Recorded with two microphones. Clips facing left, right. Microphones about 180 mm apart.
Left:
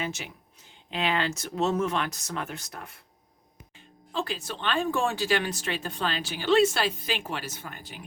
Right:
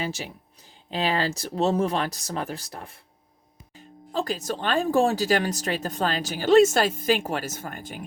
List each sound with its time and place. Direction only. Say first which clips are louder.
0.0 s speech: right 3 dB; 35° right (ahead or behind)